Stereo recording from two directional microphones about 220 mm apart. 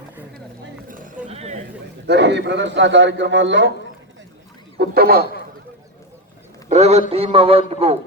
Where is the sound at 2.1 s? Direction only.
50° right (ahead or behind).